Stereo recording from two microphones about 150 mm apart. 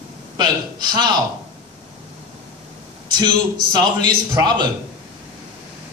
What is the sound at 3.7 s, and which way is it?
Speech, 30° right (ahead or behind).